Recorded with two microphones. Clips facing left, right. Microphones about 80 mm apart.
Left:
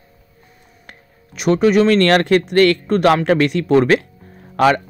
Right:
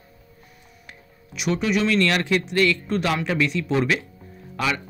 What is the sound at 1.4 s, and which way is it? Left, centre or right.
Speech, left.